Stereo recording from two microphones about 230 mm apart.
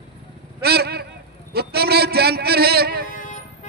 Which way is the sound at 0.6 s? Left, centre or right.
Right.